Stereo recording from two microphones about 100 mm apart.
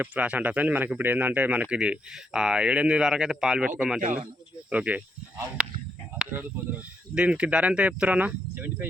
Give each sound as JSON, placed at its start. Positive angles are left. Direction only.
{"t": 0.0, "sound": "speech", "side_deg": -15}
{"t": 6.3, "sound": "speech", "side_deg": -15}